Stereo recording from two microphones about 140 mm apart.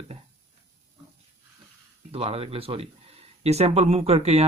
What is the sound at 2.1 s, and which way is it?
Speech, 45° right (ahead or behind).